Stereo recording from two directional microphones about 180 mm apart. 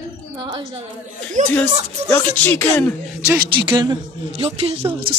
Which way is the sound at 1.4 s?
45° right (ahead or behind).